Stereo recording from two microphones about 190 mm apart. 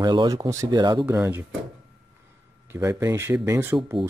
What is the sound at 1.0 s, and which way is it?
Speech, 10° right (ahead or behind).